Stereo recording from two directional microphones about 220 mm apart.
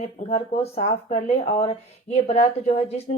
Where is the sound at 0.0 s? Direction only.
30° left (ahead or behind).